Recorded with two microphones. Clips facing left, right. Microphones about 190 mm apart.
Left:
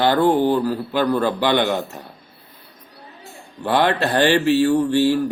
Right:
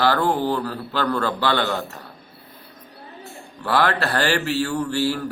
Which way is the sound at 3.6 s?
20° left (ahead or behind).